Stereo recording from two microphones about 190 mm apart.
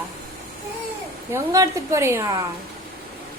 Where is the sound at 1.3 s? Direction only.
15° right (ahead or behind).